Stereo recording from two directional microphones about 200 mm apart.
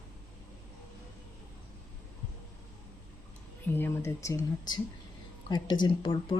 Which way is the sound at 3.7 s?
10° left (ahead or behind).